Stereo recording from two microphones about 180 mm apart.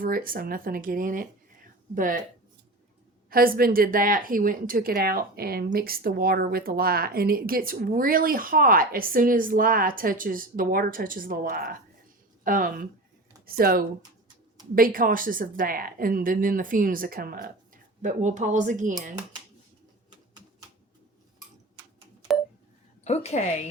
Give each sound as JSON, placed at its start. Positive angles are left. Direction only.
{"t": 0.0, "sound": "speech", "side_deg": -50}
{"t": 3.2, "sound": "speech", "side_deg": -55}
{"t": 23.0, "sound": "a woman's voice", "side_deg": 35}